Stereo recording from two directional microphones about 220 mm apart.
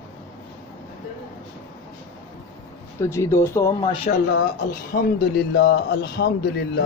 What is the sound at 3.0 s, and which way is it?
Speech, 10° left (ahead or behind).